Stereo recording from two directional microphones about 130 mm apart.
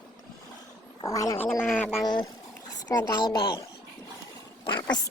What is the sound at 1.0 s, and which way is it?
Speech, 25° left (ahead or behind).